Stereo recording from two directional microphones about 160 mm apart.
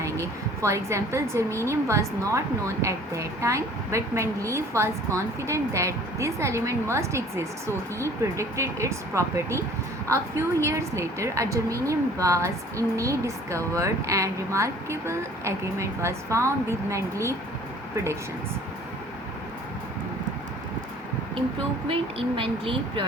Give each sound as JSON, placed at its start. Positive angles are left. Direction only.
{"t": 0.0, "sound": "a woman's voice", "side_deg": -20}
{"t": 22.4, "sound": "speech", "side_deg": -35}